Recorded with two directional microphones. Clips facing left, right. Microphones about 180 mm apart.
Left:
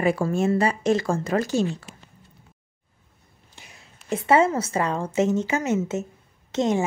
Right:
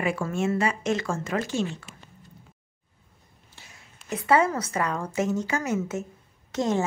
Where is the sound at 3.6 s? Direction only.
15° left (ahead or behind).